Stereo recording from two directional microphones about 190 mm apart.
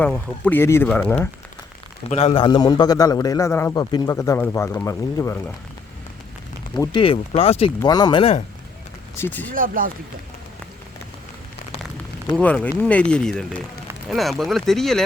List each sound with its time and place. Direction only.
0.0 s a man's voice: 10° left (ahead or behind)
2.0 s a man's voice: 35° left (ahead or behind); by 5.4 s 15° left (ahead or behind)
6.7 s speech: 25° left (ahead or behind)
7.8 s speech: 20° left (ahead or behind)
9.1 s a man's voice: 10° left (ahead or behind)
9.6 s speech: 45° right (ahead or behind)
12.4 s a man's voice: 5° left (ahead or behind)